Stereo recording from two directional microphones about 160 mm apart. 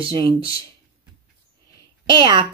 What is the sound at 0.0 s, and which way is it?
Speech, 35° right (ahead or behind).